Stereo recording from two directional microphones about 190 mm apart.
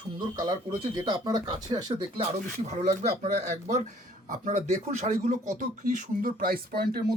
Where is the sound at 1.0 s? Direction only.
20° right (ahead or behind).